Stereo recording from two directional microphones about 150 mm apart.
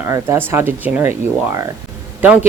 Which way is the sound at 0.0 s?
15° right (ahead or behind).